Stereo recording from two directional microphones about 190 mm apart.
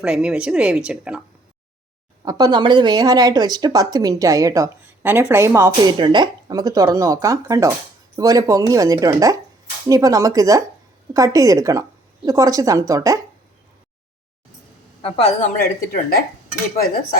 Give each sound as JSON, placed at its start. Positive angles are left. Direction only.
{"t": 0.0, "sound": "speech", "side_deg": -5}
{"t": 2.2, "sound": "a woman's voice", "side_deg": -20}
{"t": 15.0, "sound": "a woman's voice", "side_deg": 30}
{"t": 15.4, "sound": "speech", "side_deg": 50}